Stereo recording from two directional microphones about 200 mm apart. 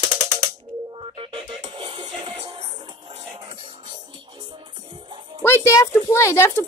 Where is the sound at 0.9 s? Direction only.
30° right (ahead or behind).